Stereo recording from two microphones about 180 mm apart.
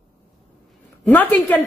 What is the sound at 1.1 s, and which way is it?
Speech, 10° left (ahead or behind).